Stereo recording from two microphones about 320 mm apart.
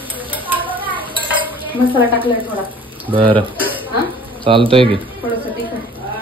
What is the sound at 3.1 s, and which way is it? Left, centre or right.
Speech, centre.